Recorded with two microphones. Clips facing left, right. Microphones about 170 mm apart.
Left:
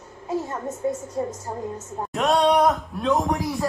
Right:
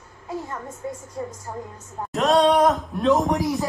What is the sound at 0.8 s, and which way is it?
Speech, 25° left (ahead or behind).